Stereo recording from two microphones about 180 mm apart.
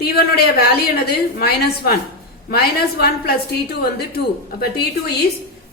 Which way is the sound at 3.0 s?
60° left (ahead or behind).